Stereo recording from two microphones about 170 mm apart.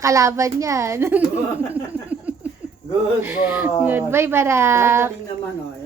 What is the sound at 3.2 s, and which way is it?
A woman's voice, 10° right (ahead or behind).